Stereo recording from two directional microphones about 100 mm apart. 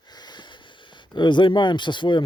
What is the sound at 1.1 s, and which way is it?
Speech, 50° left (ahead or behind).